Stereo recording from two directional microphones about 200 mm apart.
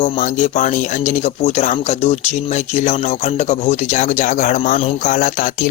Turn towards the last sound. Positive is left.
turn(degrees=40)  # may be behind; listen again after turning